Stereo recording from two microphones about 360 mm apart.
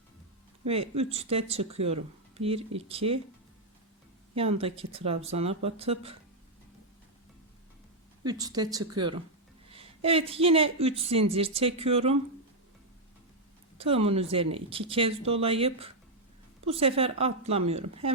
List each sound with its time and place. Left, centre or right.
1.1 s a woman's voice: centre
4.4 s a woman's voice: centre
8.2 s a woman's voice: centre
13.7 s a woman's voice: centre